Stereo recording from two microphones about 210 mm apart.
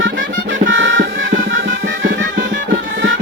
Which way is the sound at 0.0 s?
60° right (ahead or behind).